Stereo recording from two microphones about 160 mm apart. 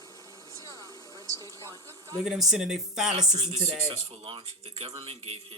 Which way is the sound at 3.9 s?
40° right (ahead or behind).